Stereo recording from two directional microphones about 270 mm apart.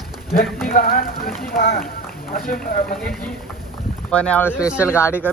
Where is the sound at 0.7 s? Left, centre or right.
Left.